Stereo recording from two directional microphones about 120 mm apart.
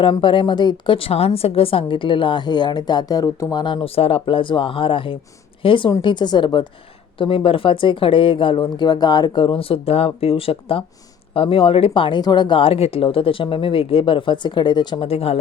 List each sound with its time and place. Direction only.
0.0 s a woman's voice: 45° left (ahead or behind)
3.8 s a woman's voice: 55° left (ahead or behind); by 15.0 s 35° left (ahead or behind)
15.0 s speech: 55° left (ahead or behind)